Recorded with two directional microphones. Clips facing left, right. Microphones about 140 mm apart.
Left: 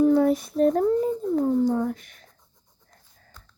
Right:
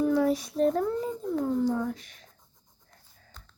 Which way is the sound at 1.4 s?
40° left (ahead or behind).